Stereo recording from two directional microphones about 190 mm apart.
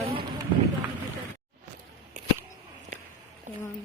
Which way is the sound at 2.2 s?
40° right (ahead or behind).